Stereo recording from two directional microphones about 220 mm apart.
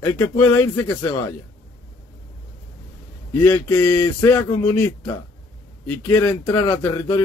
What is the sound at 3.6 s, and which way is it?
Speech, 10° left (ahead or behind).